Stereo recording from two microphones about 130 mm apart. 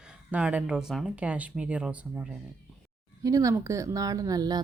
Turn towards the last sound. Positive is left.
turn(degrees=-30)  # may be behind; listen again after turning